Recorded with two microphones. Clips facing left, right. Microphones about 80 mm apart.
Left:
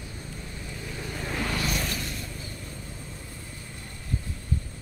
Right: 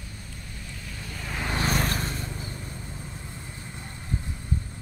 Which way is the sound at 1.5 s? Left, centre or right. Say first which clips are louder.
Right 3 dB; right.